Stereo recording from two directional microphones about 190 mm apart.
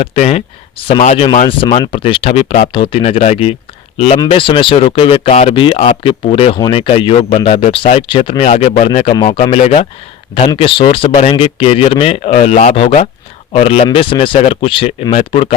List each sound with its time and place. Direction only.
0.0 s speech: 30° left (ahead or behind)
1.5 s speech: 25° left (ahead or behind)